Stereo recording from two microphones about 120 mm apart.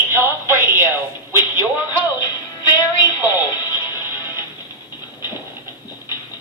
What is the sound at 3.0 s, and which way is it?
Music, 20° right (ahead or behind).